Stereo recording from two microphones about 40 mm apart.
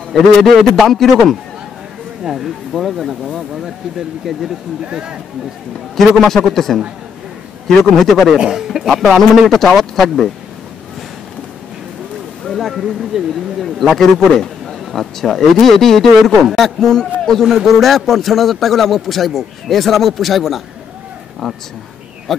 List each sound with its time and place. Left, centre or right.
0.1 s a man's voice: centre
2.2 s a man's voice: centre
4.8 s speech: right
5.9 s a man's voice: centre
8.4 s a man's voice: centre
9.0 s a man's voice: centre
12.4 s speech: centre
13.7 s a man's voice: centre
17.4 s a man's voice: centre
22.3 s a man's voice: centre